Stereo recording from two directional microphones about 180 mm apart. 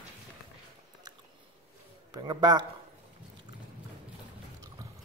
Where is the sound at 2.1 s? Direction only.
25° right (ahead or behind).